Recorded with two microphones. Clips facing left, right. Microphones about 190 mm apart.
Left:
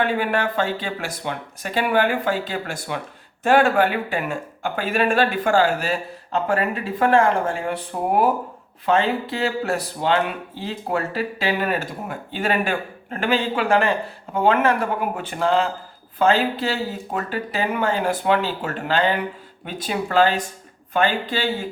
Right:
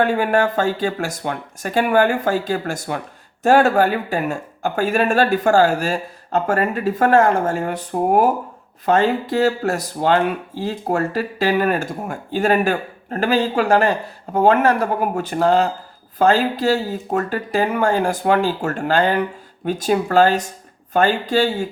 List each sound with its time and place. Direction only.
0.0 s speech: 45° right (ahead or behind)